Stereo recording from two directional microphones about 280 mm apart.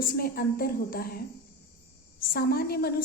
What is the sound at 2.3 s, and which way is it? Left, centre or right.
Speech, left.